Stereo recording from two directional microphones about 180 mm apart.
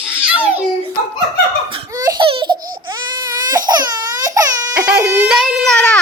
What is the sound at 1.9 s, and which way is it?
Laughter, 25° right (ahead or behind).